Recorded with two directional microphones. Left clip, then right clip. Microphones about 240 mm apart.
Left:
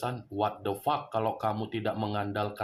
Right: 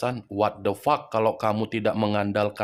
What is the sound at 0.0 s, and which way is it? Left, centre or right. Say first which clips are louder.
Speech: right 6 dB; right.